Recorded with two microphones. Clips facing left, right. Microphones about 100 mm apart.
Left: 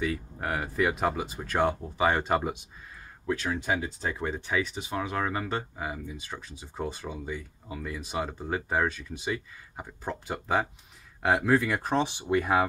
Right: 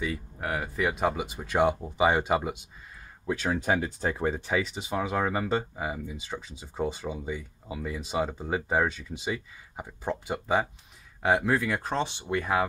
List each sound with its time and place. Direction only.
0.0 s speech: centre (ahead or behind)
4.0 s speech: 30° right (ahead or behind); by 11.6 s 5° right (ahead or behind)
11.6 s speech: 15° left (ahead or behind)